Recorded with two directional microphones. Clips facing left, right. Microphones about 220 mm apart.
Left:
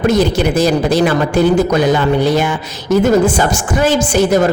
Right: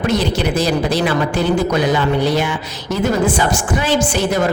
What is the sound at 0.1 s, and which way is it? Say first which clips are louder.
A woman's voice: left 4 dB; 45° left (ahead or behind).